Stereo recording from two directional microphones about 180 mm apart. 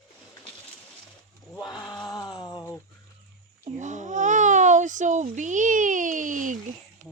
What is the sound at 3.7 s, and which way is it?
Babbling, 40° right (ahead or behind).